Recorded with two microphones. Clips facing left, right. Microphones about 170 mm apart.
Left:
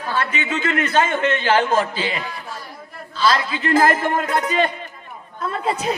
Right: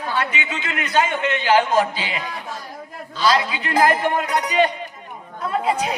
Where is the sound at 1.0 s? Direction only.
40° left (ahead or behind).